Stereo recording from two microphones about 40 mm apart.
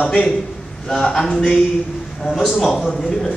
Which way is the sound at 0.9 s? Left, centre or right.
Centre.